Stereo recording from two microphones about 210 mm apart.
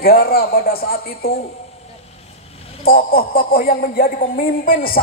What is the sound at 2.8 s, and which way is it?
A man's voice, 45° left (ahead or behind).